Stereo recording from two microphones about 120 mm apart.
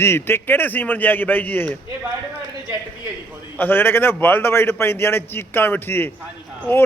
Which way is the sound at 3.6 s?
15° left (ahead or behind).